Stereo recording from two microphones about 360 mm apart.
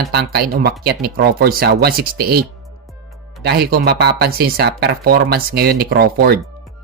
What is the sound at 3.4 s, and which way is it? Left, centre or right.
Speech, right.